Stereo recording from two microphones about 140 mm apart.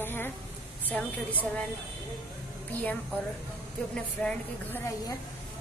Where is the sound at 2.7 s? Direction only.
10° left (ahead or behind).